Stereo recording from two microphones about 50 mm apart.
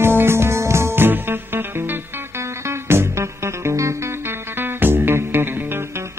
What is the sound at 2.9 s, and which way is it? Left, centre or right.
Music, right.